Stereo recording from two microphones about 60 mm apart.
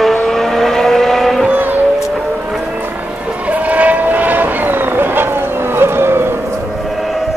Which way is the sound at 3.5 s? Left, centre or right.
Right.